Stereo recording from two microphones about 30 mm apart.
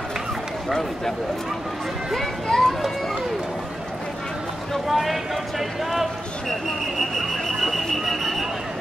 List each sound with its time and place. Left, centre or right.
2.4 s speech: centre
4.8 s speech: centre
7.0 s a sound: centre